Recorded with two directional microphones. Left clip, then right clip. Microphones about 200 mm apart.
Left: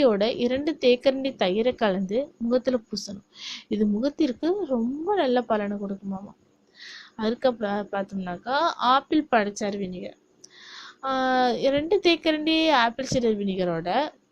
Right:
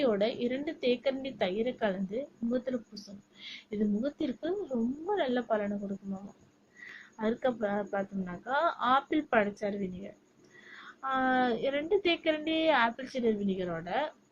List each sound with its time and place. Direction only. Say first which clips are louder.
0.0 s a woman's voice: left 8 dB; 45° left (ahead or behind)
7.2 s a woman's voice: left 6 dB; 30° left (ahead or behind)